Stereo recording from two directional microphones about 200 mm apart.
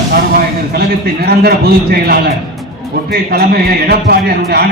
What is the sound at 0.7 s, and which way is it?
A man's voice, 50° right (ahead or behind).